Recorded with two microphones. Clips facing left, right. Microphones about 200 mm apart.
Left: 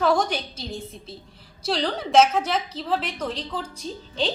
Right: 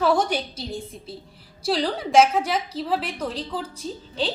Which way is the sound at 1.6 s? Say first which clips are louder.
Right 2 dB; 10° right (ahead or behind).